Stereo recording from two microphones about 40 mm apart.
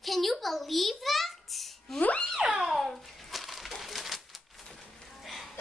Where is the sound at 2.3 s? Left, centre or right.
Centre.